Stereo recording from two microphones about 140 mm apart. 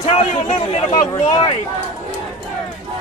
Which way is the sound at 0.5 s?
35° left (ahead or behind).